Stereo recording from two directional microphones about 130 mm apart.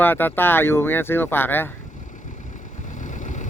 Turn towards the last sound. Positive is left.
turn(degrees=70)  # may be behind; listen again after turning